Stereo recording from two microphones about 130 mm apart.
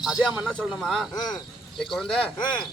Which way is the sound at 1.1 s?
30° left (ahead or behind).